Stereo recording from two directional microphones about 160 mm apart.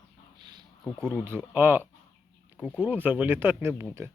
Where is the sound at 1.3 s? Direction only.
10° right (ahead or behind).